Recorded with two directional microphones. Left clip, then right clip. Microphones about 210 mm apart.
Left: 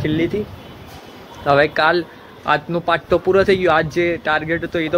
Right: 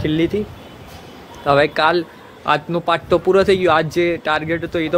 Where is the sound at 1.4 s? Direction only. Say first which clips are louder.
Even; 15° right (ahead or behind).